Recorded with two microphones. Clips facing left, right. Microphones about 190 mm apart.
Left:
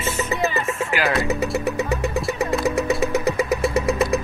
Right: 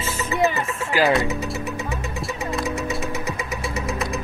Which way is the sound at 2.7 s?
65° left (ahead or behind).